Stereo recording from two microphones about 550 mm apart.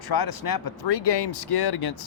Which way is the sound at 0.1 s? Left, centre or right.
Left.